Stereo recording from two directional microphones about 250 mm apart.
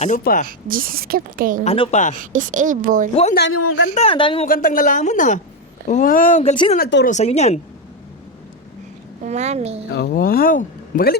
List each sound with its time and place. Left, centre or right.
0.0 s speech: left
0.7 s a woman's voice: right
1.6 s speech: left
2.1 s a woman's voice: right
3.5 s speech: left
3.9 s speech: left
4.4 s speech: left
6.7 s speech: left
9.2 s a woman's voice: right
9.9 s speech: left